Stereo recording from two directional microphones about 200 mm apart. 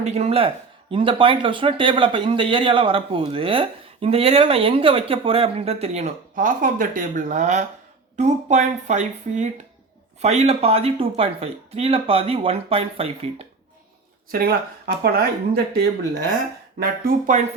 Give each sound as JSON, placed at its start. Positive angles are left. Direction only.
{"t": 0.0, "sound": "a woman's voice", "side_deg": -35}
{"t": 14.3, "sound": "speech", "side_deg": -50}